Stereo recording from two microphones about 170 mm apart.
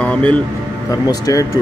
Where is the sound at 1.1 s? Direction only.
20° left (ahead or behind).